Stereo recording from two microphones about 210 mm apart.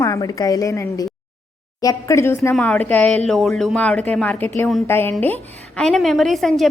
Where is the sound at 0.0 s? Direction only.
15° left (ahead or behind).